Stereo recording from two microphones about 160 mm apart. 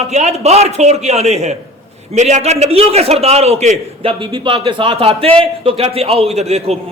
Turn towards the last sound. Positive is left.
turn(degrees=-40)  # may be behind; listen again after turning